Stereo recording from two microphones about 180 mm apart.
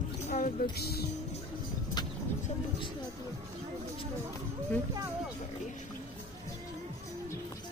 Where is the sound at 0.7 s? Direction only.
60° left (ahead or behind).